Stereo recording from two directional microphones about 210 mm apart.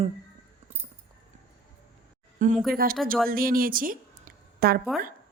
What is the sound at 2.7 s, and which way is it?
A woman's voice, 45° right (ahead or behind).